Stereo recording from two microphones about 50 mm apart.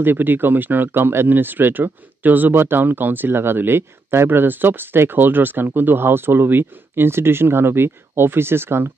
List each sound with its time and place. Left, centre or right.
0.0 s speech: right